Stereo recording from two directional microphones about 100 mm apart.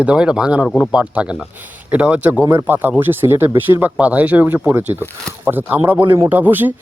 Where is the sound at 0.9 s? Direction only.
10° right (ahead or behind).